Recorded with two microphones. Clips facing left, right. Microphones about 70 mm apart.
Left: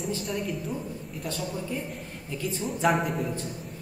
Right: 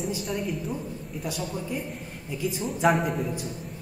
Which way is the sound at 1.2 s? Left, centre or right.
Centre.